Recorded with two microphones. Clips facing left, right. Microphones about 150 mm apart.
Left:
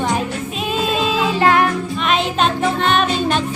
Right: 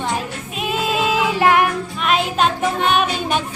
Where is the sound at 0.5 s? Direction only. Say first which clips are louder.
Even; 10° right (ahead or behind).